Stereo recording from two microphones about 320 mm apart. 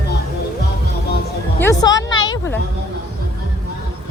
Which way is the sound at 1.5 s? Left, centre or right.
Centre.